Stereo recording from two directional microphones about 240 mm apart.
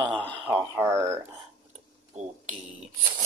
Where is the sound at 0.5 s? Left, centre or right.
Centre.